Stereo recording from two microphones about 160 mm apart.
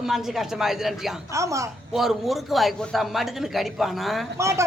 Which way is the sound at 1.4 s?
20° right (ahead or behind).